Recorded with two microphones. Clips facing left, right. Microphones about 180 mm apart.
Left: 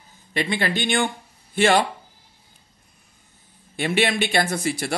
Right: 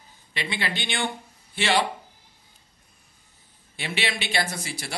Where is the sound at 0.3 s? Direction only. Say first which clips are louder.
Left 7 dB; 50° left (ahead or behind).